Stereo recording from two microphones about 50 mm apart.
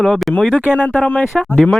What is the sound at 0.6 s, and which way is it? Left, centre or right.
Speech, left.